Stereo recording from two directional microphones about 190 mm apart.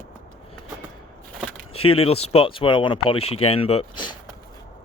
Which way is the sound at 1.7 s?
30° left (ahead or behind).